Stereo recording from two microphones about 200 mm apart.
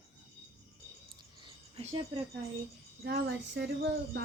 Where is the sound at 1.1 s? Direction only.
25° right (ahead or behind).